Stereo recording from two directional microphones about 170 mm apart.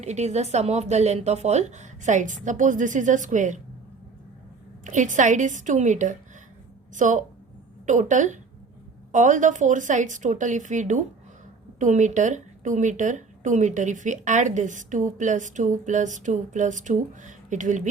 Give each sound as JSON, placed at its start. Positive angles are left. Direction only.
{"t": 0.0, "sound": "speech", "side_deg": -40}
{"t": 4.8, "sound": "speech", "side_deg": -50}